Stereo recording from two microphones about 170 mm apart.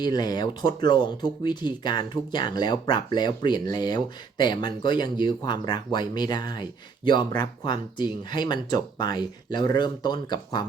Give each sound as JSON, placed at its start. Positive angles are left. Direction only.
{"t": 0.0, "sound": "speech", "side_deg": 25}